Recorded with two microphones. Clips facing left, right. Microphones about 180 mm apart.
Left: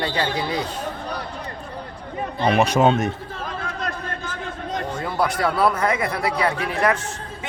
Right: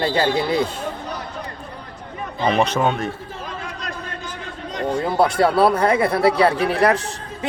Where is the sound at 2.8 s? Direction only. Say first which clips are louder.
Left 3 dB; 20° left (ahead or behind).